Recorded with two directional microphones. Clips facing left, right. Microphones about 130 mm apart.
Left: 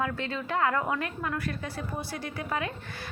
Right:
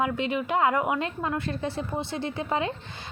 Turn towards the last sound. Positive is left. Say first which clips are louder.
# right 4 dB
turn(degrees=-25)  # may be behind; listen again after turning